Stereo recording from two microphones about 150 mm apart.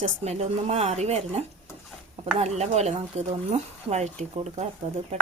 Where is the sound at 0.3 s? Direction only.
45° right (ahead or behind).